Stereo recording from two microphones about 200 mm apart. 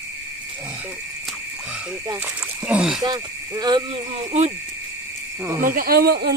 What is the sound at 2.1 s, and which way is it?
Speech, 10° right (ahead or behind).